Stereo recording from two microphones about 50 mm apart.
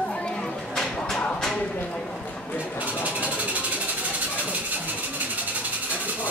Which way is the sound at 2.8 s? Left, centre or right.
Right.